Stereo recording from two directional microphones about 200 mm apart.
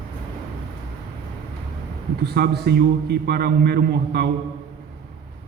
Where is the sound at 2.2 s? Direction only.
50° right (ahead or behind).